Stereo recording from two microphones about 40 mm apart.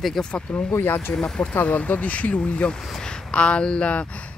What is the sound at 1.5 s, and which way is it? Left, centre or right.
Speech, left.